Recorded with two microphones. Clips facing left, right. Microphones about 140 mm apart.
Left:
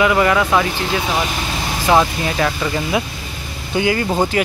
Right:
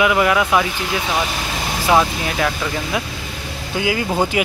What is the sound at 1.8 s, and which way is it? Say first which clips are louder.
Speech: left 1 dB; centre (ahead or behind).